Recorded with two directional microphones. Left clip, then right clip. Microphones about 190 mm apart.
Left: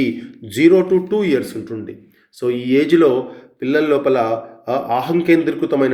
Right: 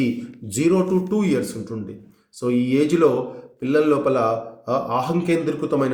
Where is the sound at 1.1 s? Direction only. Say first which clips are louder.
Left 5 dB; 15° left (ahead or behind).